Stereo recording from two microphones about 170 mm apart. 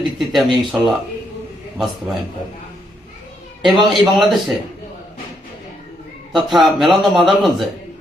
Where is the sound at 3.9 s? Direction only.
Centre (ahead or behind).